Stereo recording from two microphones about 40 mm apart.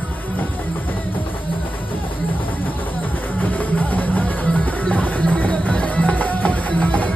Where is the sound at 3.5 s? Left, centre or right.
Left.